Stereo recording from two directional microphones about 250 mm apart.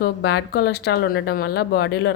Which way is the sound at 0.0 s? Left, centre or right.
Left.